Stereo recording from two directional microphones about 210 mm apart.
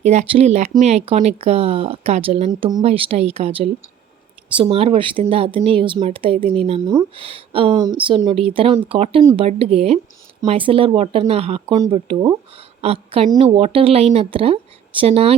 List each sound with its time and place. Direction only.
0.0 s speech: 30° right (ahead or behind)